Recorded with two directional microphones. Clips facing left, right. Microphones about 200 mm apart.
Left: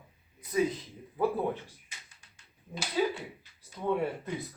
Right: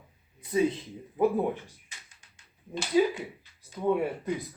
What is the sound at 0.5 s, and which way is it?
Speech, 25° right (ahead or behind).